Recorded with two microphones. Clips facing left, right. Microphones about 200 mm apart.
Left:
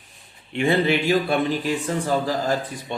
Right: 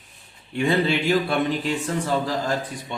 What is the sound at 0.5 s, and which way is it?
Speech, 15° left (ahead or behind).